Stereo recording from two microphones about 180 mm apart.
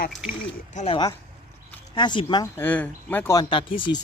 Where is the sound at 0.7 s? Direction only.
40° left (ahead or behind).